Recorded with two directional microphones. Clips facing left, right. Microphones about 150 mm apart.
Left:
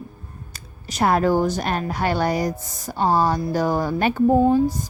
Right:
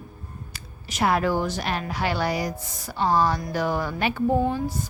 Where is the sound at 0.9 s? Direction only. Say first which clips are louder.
Left 4 dB; 40° left (ahead or behind).